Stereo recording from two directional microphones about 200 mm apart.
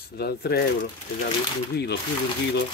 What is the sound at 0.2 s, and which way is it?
Speech, 50° left (ahead or behind).